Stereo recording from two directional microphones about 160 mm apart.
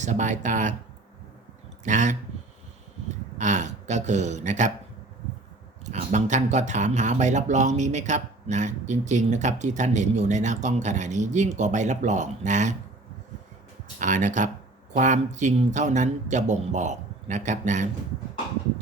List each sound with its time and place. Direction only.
0.0 s speech: 50° right (ahead or behind)
1.8 s speech: 50° right (ahead or behind)
3.3 s speech: 50° right (ahead or behind)
5.8 s speech: 45° right (ahead or behind)
14.0 s speech: 50° right (ahead or behind)